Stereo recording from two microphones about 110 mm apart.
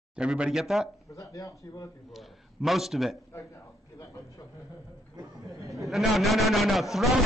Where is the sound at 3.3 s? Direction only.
25° left (ahead or behind).